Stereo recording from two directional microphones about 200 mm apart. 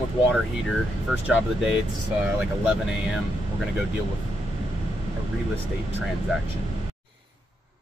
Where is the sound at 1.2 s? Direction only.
5° right (ahead or behind).